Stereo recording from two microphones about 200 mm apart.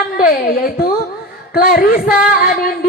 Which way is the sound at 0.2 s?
45° left (ahead or behind).